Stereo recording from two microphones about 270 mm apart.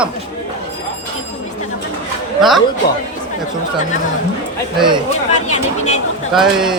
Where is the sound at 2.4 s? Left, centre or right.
Centre.